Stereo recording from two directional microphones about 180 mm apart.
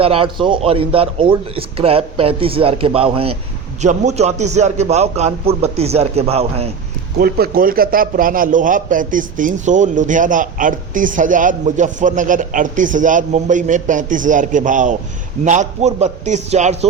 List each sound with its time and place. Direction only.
0.0 s a man's voice: 30° right (ahead or behind)
7.2 s a man's voice: 60° right (ahead or behind); by 16.7 s 40° right (ahead or behind)